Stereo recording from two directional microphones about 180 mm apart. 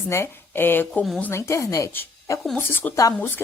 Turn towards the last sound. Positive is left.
turn(degrees=15)  # may be behind; listen again after turning